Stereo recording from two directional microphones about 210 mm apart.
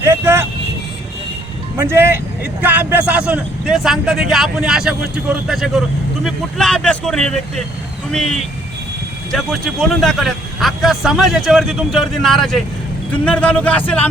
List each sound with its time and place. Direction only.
0.0 s vehicle: 10° right (ahead or behind)
1.7 s speech: 10° right (ahead or behind); by 14.1 s 10° left (ahead or behind)